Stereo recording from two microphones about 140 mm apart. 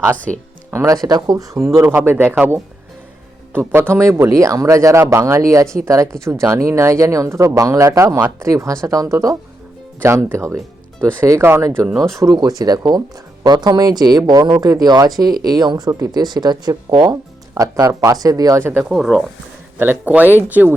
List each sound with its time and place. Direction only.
0.7 s speech: 20° right (ahead or behind)
3.5 s speech: 15° right (ahead or behind)
18.8 s speech: 5° right (ahead or behind)
19.8 s speech: 15° right (ahead or behind)